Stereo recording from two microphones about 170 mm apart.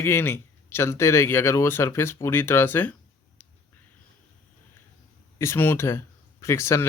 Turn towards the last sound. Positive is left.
turn(degrees=15)  # may be behind; listen again after turning